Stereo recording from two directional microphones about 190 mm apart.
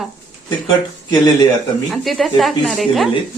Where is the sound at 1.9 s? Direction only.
Centre (ahead or behind).